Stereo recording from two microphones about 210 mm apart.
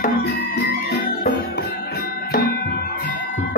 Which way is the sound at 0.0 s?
45° left (ahead or behind).